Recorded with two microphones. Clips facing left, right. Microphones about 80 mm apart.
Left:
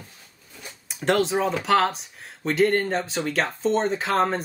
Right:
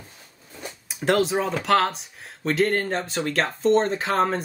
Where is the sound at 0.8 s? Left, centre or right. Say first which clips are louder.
Right 1 dB; centre.